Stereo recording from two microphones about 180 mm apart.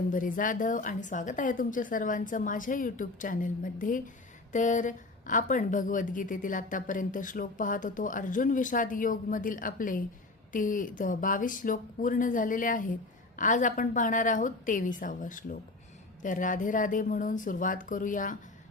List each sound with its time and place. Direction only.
0.1 s a woman's voice: 50° left (ahead or behind)